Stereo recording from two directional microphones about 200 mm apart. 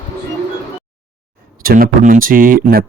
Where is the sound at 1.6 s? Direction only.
45° right (ahead or behind).